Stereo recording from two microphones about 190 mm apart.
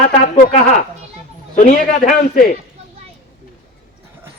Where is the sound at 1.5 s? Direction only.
45° left (ahead or behind).